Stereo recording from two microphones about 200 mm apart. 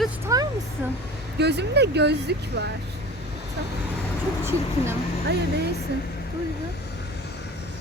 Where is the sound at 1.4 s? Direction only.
55° right (ahead or behind).